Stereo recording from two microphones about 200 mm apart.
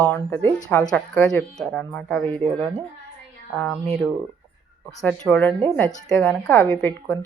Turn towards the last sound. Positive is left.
turn(degrees=5)  # may be behind; listen again after turning